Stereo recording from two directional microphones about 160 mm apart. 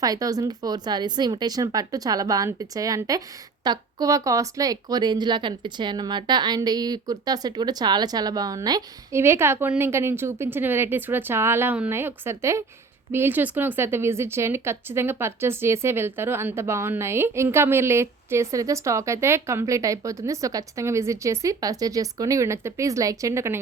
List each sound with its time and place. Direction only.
0.0 s speech: 20° right (ahead or behind)